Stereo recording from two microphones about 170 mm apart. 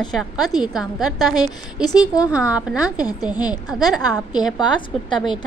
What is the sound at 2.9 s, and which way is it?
Speech, 20° left (ahead or behind).